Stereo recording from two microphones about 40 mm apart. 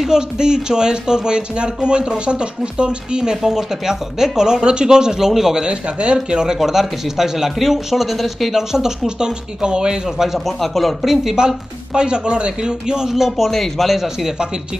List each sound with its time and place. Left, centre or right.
0.0 s speech: centre
5.6 s speech: right; by 8.6 s centre
8.7 s speech: centre
10.0 s speech: centre
10.4 s speech: centre
11.2 s speech: centre
13.4 s speech: centre